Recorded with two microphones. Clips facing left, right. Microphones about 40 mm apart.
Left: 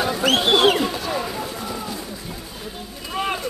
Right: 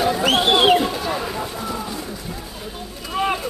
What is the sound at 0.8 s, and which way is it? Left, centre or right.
Run, centre.